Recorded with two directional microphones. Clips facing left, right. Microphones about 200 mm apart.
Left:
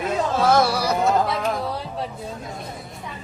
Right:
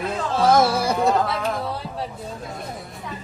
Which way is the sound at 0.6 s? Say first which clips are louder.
Right 1 dB; 20° right (ahead or behind).